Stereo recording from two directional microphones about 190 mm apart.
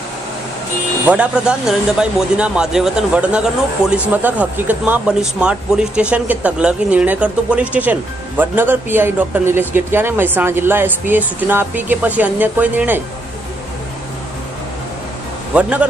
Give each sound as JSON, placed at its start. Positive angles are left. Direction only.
{"t": 1.0, "sound": "speech", "side_deg": -5}
{"t": 15.5, "sound": "speech", "side_deg": -5}